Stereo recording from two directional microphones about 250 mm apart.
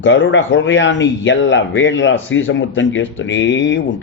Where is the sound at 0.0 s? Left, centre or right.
Left.